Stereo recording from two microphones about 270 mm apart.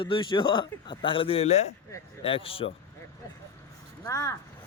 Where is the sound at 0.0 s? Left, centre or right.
Centre.